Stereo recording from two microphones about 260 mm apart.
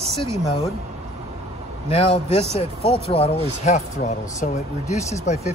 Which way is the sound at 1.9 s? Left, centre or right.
Left.